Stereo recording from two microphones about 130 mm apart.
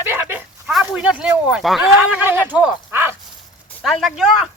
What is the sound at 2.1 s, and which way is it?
Speech, 15° right (ahead or behind).